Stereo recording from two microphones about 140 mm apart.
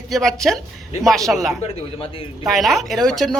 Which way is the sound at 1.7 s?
40° left (ahead or behind).